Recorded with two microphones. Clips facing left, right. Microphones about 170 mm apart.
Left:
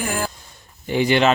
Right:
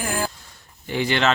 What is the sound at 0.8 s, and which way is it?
Speech, 15° left (ahead or behind).